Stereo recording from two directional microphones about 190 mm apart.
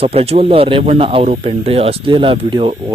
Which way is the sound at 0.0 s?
30° right (ahead or behind).